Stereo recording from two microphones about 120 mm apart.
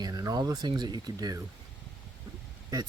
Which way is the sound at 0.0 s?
30° right (ahead or behind).